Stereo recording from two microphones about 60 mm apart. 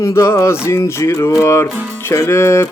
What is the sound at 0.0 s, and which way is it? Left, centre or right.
Music, left.